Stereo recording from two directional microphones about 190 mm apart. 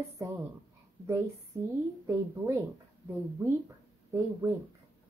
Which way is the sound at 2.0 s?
15° right (ahead or behind).